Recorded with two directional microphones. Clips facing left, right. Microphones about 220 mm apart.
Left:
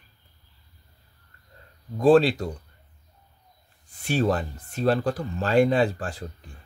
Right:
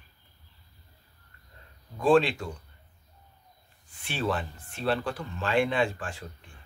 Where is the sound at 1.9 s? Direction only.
40° left (ahead or behind).